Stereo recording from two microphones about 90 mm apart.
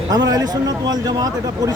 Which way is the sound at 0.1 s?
45° right (ahead or behind).